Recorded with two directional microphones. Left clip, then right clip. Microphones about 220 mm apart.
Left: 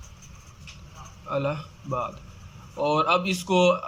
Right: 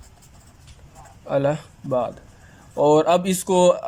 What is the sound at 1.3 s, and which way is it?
Speech, 25° right (ahead or behind).